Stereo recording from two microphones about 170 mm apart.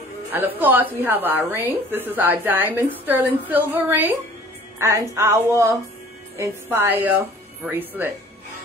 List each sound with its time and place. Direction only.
0.3 s a woman's voice: 10° right (ahead or behind)